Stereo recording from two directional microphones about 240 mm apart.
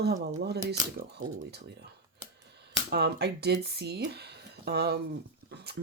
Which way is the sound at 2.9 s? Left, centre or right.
Right.